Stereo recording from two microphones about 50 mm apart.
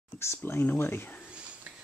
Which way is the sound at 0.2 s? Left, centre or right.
Left.